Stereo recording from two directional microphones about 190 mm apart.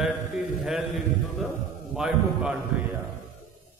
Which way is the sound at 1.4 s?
Centre (ahead or behind).